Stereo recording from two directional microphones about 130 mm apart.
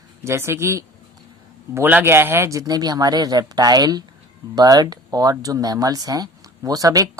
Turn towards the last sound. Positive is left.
turn(degrees=-25)  # may be behind; listen again after turning